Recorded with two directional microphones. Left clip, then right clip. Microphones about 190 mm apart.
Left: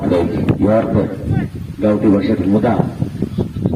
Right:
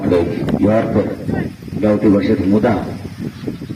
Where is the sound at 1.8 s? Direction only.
45° left (ahead or behind).